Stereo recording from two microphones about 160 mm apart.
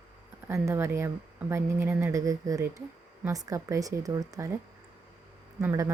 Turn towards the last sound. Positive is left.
turn(degrees=-20)  # may be behind; listen again after turning